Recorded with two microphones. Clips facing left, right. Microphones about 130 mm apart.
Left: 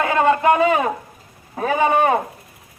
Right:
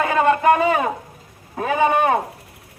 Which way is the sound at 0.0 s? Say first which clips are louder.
Even; 20° left (ahead or behind).